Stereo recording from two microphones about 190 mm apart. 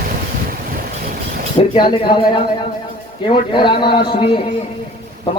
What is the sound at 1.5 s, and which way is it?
Speech, 25° left (ahead or behind).